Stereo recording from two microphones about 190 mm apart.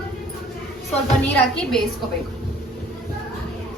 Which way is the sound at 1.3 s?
5° left (ahead or behind).